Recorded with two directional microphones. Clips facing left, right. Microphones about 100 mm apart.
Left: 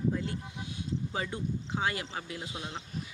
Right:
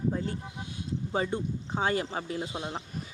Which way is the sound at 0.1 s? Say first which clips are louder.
Right 1 dB; 35° right (ahead or behind).